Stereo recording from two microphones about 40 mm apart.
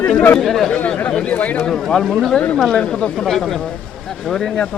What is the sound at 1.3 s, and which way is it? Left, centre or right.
Speech, left.